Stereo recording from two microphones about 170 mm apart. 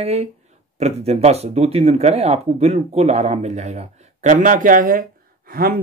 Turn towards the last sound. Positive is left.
turn(degrees=-60)  # may be behind; listen again after turning